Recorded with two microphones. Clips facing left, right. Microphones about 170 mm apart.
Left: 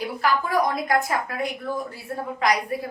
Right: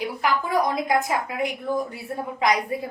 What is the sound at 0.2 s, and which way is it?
A woman's voice, 20° right (ahead or behind).